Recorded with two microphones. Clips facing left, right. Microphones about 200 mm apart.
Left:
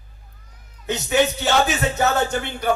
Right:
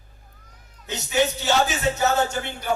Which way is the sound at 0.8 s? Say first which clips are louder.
Left 3 dB; 60° left (ahead or behind).